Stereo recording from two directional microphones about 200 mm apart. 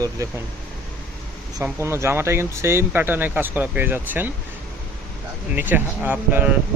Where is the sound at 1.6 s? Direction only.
15° right (ahead or behind).